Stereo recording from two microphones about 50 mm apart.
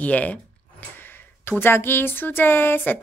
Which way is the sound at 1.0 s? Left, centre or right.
Left.